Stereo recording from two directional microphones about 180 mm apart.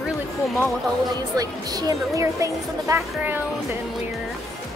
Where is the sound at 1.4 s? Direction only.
20° right (ahead or behind).